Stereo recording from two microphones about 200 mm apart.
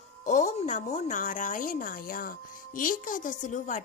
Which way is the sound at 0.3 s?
40° left (ahead or behind).